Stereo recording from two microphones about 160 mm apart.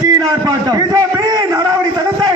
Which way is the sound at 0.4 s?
25° right (ahead or behind).